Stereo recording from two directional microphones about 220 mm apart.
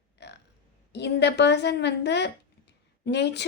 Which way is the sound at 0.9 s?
50° left (ahead or behind).